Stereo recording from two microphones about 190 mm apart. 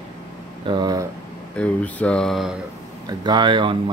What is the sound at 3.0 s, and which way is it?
Speech, 25° right (ahead or behind).